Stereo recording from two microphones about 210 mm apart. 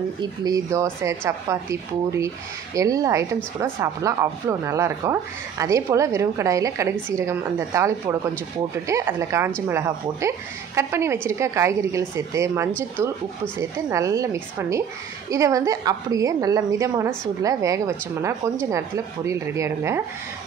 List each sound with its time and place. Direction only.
0.2 s speech: 20° right (ahead or behind)